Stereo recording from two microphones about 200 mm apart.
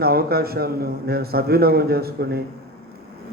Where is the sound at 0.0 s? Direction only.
50° right (ahead or behind).